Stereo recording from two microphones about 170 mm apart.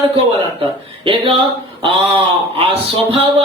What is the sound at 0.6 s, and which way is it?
Speech, 30° right (ahead or behind).